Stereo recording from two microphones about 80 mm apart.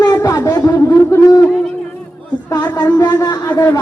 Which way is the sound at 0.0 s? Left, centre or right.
Left.